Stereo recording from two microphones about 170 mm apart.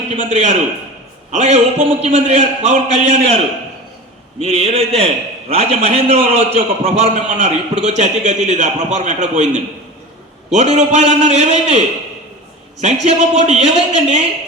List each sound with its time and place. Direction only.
0.2 s a man's voice: 40° right (ahead or behind)
4.4 s a man's voice: 35° right (ahead or behind)
10.5 s a man's voice: 40° right (ahead or behind)
12.8 s a man's voice: 40° right (ahead or behind)